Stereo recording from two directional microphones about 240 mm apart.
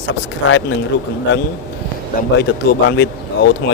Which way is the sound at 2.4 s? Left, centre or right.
Left.